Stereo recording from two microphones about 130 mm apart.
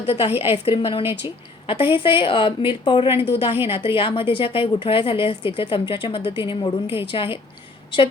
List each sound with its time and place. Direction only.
0.0 s a woman's voice: 50° left (ahead or behind)